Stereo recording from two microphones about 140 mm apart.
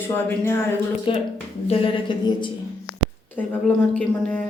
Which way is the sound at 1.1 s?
35° left (ahead or behind).